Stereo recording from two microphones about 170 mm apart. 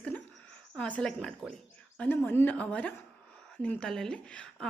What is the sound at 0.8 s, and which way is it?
A woman's voice, 5° left (ahead or behind).